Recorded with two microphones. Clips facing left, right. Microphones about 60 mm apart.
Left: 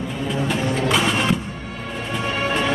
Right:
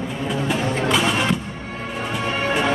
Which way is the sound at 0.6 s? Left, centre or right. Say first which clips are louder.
Even; right.